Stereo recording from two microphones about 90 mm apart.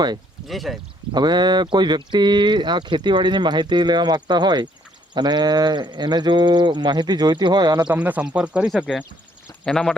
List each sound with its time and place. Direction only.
0.4 s speech: centre (ahead or behind)
1.1 s speech: 55° right (ahead or behind)
7.9 s speech: 15° right (ahead or behind)
9.6 s speech: 10° left (ahead or behind)